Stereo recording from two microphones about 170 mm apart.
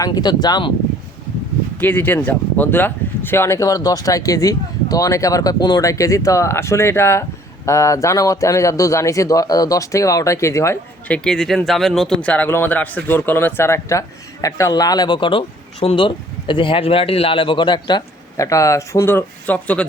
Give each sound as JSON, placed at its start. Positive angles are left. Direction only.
{"t": 0.0, "sound": "speech", "side_deg": 25}
{"t": 1.8, "sound": "speech", "side_deg": 10}
{"t": 11.2, "sound": "speech", "side_deg": 5}